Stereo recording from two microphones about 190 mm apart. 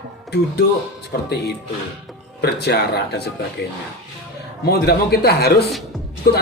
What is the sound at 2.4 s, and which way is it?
A man's voice, 60° left (ahead or behind).